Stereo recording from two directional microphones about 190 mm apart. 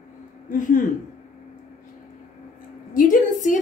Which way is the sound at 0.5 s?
40° left (ahead or behind).